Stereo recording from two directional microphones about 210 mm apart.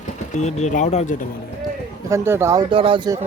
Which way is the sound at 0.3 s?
35° left (ahead or behind).